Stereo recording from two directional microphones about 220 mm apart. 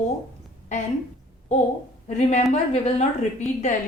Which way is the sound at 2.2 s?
30° left (ahead or behind).